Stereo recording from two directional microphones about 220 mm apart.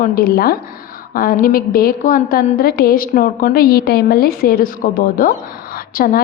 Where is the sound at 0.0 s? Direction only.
40° left (ahead or behind).